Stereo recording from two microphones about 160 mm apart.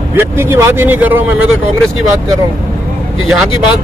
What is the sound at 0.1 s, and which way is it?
Speech, 15° right (ahead or behind).